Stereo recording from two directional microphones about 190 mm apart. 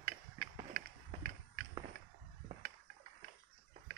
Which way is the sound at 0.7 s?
50° right (ahead or behind).